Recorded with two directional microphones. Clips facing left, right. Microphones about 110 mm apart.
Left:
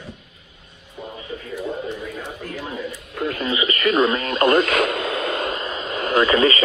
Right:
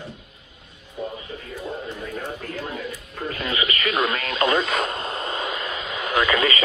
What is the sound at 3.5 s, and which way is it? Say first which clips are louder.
Radio: left 5 dB; 25° left (ahead or behind).